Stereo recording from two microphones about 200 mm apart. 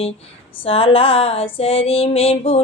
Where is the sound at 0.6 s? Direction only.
30° left (ahead or behind).